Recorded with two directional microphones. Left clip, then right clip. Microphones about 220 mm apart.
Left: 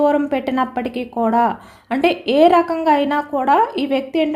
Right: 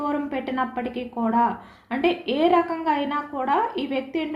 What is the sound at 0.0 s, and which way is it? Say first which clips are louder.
A woman's voice: left 10 dB; 55° left (ahead or behind).